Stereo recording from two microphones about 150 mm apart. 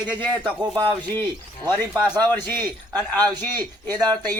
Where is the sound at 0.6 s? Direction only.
30° right (ahead or behind).